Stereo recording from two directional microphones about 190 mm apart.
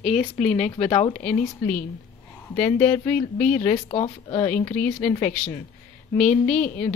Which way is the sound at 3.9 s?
35° left (ahead or behind).